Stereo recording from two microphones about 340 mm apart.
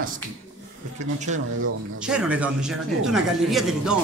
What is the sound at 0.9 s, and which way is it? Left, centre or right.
Speech, right.